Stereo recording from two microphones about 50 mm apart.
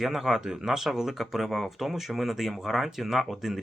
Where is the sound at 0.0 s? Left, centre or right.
Centre.